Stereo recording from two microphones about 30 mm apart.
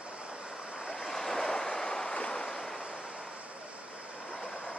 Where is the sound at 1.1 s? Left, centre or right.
Centre.